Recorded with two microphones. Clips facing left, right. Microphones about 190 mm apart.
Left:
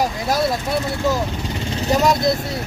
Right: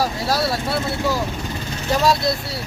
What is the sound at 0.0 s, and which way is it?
Speech, 20° left (ahead or behind).